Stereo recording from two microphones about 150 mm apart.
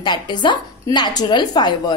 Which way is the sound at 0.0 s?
30° left (ahead or behind).